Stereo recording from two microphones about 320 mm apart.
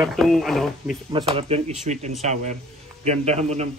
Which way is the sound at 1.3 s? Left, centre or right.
Centre.